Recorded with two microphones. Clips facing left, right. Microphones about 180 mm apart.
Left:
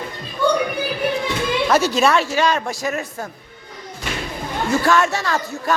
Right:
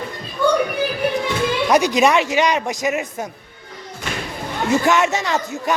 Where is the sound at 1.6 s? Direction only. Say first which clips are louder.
Right 2 dB; 15° right (ahead or behind).